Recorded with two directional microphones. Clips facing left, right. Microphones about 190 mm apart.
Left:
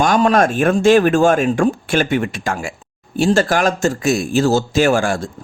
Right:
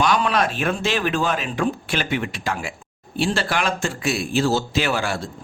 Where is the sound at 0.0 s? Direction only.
45° left (ahead or behind).